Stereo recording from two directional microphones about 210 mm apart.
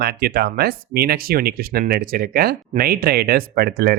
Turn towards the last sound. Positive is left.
turn(degrees=-50)  # may be behind; listen again after turning